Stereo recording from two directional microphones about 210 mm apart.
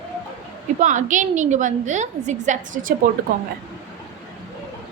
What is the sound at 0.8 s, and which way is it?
A woman's voice, 35° right (ahead or behind).